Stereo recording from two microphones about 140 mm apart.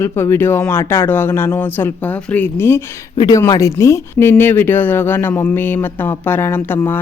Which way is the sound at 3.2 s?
25° left (ahead or behind).